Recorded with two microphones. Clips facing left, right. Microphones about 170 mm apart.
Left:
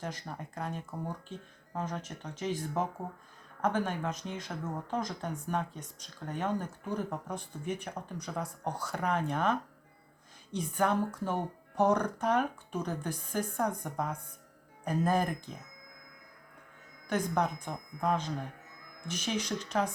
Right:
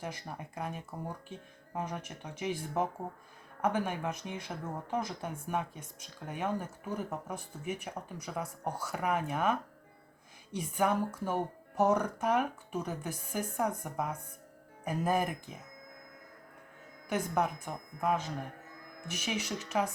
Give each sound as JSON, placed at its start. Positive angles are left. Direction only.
{"t": 0.0, "sound": "speech", "side_deg": -10}
{"t": 17.1, "sound": "speech", "side_deg": -10}